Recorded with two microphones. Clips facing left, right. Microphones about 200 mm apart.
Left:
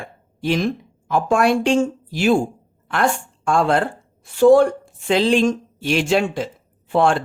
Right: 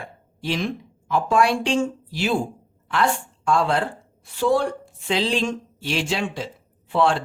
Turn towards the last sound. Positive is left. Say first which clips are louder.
# left 3 dB
turn(degrees=50)  # may be behind; listen again after turning